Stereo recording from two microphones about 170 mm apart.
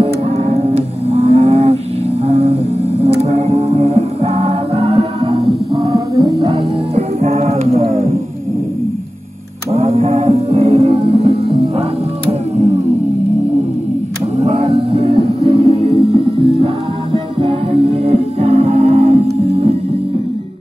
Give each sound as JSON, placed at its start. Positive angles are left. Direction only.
{"t": 0.0, "sound": "music", "side_deg": -35}
{"t": 5.9, "sound": "music", "side_deg": -20}
{"t": 7.2, "sound": "music", "side_deg": -40}
{"t": 9.7, "sound": "music", "side_deg": -35}
{"t": 14.3, "sound": "music", "side_deg": -40}